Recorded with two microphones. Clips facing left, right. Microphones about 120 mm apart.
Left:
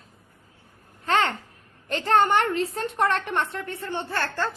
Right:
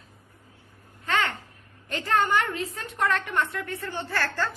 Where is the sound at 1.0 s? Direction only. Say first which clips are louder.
Left 4 dB; 35° left (ahead or behind).